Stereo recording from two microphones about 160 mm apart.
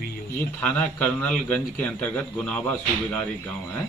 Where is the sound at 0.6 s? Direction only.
10° left (ahead or behind).